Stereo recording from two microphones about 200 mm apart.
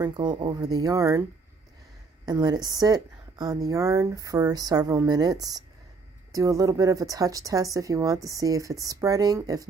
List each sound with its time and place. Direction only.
0.0 s a woman's voice: 20° right (ahead or behind)
2.2 s a woman's voice: 20° right (ahead or behind)